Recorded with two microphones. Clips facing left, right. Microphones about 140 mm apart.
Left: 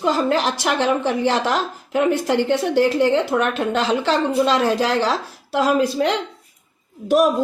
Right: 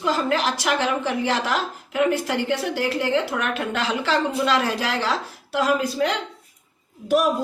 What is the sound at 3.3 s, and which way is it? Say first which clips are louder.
A woman's voice: left 6 dB; 30° left (ahead or behind).